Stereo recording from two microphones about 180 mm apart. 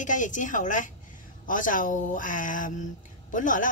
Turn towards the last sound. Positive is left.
turn(degrees=45)  # may be behind; listen again after turning